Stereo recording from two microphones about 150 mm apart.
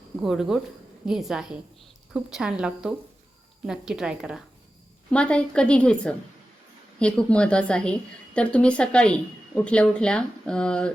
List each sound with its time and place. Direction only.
0.2 s speech: 5° right (ahead or behind)
5.1 s a woman's voice: 5° left (ahead or behind)